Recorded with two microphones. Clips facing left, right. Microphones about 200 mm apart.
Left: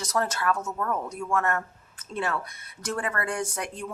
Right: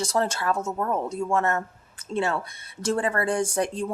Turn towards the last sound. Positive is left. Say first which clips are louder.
# right 8 dB
turn(degrees=-30)  # may be behind; listen again after turning